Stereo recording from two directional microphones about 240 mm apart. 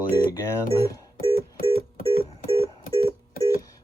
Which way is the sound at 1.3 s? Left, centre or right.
Left.